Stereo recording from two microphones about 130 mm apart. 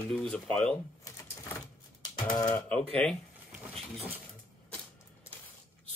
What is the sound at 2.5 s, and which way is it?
Speech, 10° left (ahead or behind).